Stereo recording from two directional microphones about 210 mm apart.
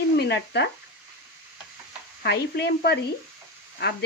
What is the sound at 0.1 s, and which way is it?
Speech, 55° left (ahead or behind).